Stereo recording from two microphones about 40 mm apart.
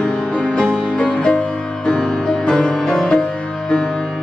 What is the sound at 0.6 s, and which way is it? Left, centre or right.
Music, left.